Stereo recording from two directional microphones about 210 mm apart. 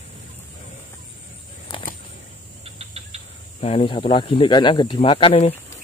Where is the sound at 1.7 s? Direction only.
25° left (ahead or behind).